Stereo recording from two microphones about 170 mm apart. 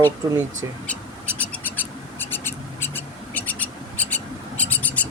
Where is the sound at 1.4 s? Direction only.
10° left (ahead or behind).